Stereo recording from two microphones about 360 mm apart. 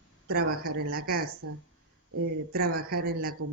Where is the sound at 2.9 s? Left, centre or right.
Right.